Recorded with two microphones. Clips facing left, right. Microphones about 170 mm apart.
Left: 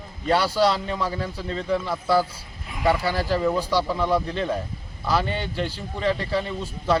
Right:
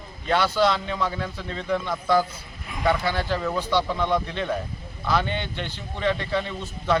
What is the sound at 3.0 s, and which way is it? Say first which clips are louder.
Speech: left 3 dB; 35° left (ahead or behind).